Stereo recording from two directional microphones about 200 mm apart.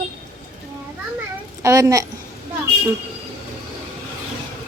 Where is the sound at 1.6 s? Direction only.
15° right (ahead or behind).